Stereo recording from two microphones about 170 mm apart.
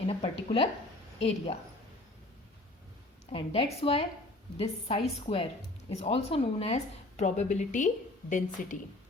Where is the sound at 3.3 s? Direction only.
35° left (ahead or behind).